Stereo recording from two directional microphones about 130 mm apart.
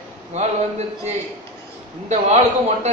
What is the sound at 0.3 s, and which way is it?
A man's voice, 55° right (ahead or behind).